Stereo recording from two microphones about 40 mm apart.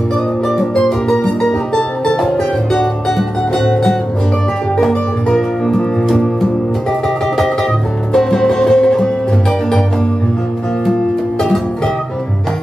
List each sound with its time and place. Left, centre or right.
0.5 s music: centre
2.1 s music: centre
8.1 s music: centre